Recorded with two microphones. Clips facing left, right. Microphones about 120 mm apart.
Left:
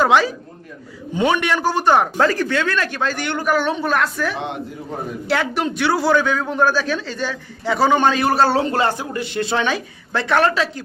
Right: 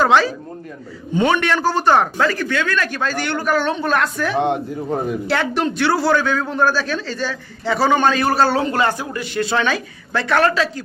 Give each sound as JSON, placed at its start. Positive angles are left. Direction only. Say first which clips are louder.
{"t": 0.0, "sound": "a woman's voice", "louder": "right 1 dB", "side_deg": 15}
{"t": 2.1, "sound": "a woman's voice", "louder": "left 1 dB", "side_deg": 35}